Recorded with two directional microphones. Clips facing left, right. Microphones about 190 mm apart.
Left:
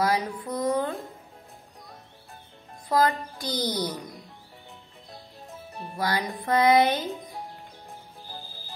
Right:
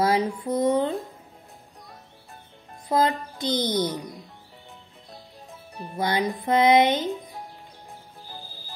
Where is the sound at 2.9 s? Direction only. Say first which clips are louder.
Right 1 dB; 20° right (ahead or behind).